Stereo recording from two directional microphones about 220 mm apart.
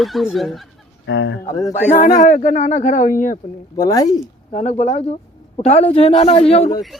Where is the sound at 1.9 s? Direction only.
35° left (ahead or behind).